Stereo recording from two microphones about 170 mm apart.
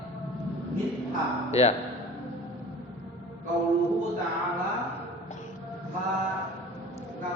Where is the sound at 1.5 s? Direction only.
40° left (ahead or behind).